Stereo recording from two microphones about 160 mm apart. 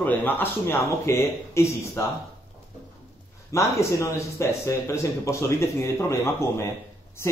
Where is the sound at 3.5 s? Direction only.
20° left (ahead or behind).